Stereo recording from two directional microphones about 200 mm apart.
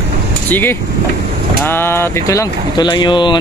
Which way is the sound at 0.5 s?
10° left (ahead or behind).